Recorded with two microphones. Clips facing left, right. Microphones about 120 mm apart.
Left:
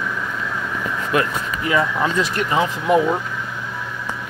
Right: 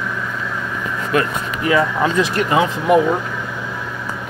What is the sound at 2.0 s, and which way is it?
Speech, 10° right (ahead or behind).